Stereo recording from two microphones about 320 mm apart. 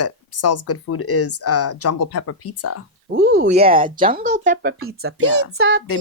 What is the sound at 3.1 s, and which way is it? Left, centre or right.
Speech, right.